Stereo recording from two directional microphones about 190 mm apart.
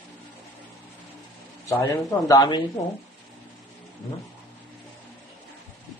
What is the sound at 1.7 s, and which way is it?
Speech, 15° left (ahead or behind).